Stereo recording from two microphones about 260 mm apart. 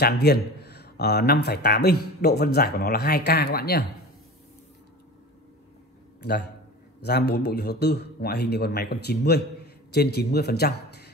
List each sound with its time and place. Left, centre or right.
0.0 s a man's voice: left
6.2 s a man's voice: left